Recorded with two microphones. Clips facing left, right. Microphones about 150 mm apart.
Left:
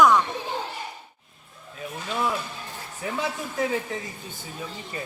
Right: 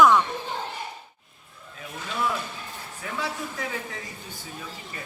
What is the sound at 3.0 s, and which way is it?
Speech, 20° left (ahead or behind).